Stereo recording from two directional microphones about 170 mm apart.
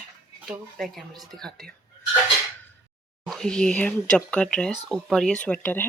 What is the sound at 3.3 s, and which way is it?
Speech, centre (ahead or behind).